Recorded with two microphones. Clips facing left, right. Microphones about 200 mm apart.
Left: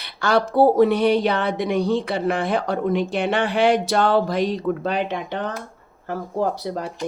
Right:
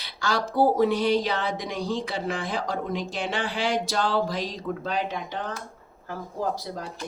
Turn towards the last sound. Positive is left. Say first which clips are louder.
# left 6 dB
turn(degrees=65)  # may be behind; listen again after turning